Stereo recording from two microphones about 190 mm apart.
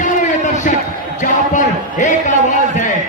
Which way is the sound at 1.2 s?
40° left (ahead or behind).